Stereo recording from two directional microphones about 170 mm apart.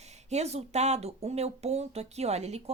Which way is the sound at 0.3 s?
40° right (ahead or behind).